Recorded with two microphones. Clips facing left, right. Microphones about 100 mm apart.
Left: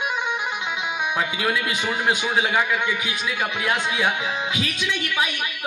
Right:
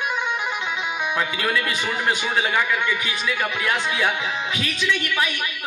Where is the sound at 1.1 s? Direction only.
15° left (ahead or behind).